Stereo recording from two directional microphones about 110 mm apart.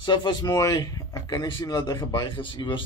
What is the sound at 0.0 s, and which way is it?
Speech, 45° left (ahead or behind).